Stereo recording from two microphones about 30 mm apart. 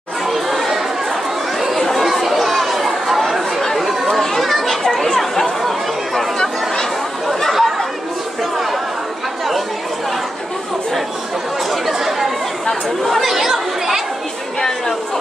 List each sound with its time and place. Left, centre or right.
0.3 s chatter: centre
1.8 s chatter: centre
2.0 s chatter: centre
4.1 s children playing: centre
4.4 s children playing: centre
4.8 s a sound: centre
6.1 s chatter: centre
7.5 s chatter: centre
11.7 s chatter: centre